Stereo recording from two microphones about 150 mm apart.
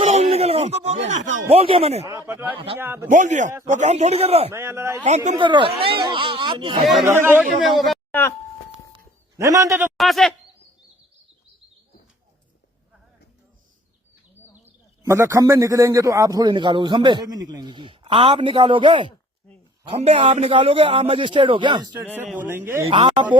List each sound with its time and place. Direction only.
0.0 s speech: 45° right (ahead or behind)
2.0 s speech: 20° right (ahead or behind)
3.1 s a man's voice: 55° right (ahead or behind)
4.5 s speech: 15° right (ahead or behind)
5.0 s a man's voice: 50° right (ahead or behind)
5.4 s a man's voice: 35° right (ahead or behind)
7.0 s speech: 15° right (ahead or behind)
7.6 s a woman's voice: centre (ahead or behind)
9.4 s a man's voice: 20° right (ahead or behind)
10.0 s a woman's voice: centre (ahead or behind)
14.5 s a man's voice: 15° right (ahead or behind)
22.0 s speech: 10° right (ahead or behind)
22.9 s a man's voice: 35° right (ahead or behind)